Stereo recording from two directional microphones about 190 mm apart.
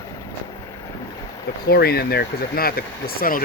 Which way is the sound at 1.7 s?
55° left (ahead or behind).